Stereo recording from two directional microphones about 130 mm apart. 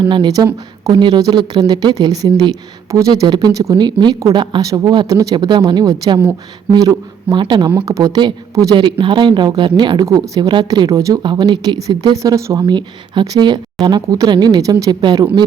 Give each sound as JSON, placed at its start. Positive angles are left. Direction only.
{"t": 0.0, "sound": "speech", "side_deg": -35}
{"t": 8.7, "sound": "speech", "side_deg": -40}